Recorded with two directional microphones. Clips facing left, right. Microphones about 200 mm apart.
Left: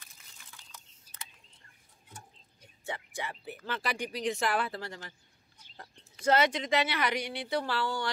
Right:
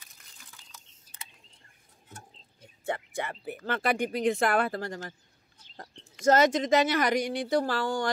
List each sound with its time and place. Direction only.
0.0 s a sound: 5° right (ahead or behind)
2.8 s speech: 55° right (ahead or behind)
6.2 s speech: 45° right (ahead or behind)